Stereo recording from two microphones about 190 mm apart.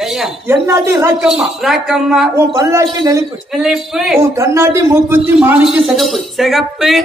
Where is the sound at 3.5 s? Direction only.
Centre (ahead or behind).